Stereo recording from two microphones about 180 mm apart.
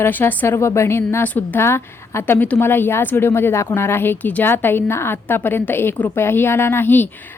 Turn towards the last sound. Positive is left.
turn(degrees=10)  # may be behind; listen again after turning